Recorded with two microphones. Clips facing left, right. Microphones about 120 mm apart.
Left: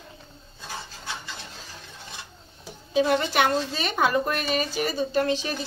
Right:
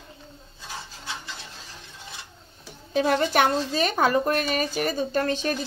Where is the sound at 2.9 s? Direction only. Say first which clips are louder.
Even; 45° right (ahead or behind).